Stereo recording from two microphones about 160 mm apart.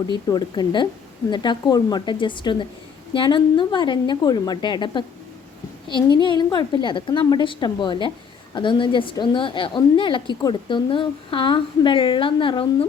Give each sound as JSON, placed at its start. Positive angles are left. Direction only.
{"t": 0.1, "sound": "a woman's voice", "side_deg": 25}